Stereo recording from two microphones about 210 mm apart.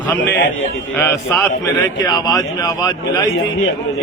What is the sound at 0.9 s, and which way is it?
A man's voice, 10° left (ahead or behind).